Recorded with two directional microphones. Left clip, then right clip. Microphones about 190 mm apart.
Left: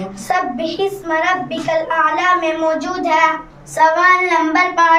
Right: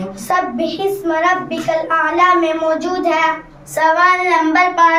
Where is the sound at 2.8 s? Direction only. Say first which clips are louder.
Left 1 dB; 20° left (ahead or behind).